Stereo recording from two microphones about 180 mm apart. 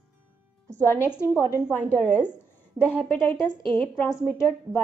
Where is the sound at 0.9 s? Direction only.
10° right (ahead or behind).